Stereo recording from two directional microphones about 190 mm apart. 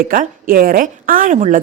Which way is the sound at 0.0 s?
50° right (ahead or behind).